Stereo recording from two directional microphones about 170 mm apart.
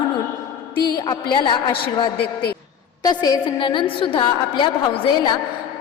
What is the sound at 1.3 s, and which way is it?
Speech, 25° left (ahead or behind).